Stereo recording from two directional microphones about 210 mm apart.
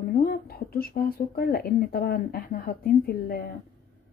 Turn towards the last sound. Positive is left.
turn(degrees=45)  # may be behind; listen again after turning